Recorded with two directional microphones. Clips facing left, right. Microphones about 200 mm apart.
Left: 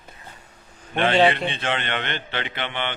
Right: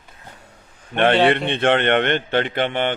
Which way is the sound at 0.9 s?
55° right (ahead or behind).